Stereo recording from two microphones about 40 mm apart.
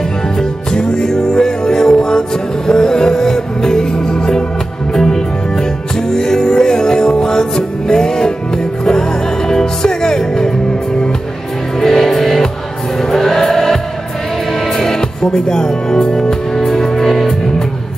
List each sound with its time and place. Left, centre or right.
0.4 s music: centre
9.5 s music: centre
11.8 s music: centre
13.1 s choir: centre
14.8 s music: centre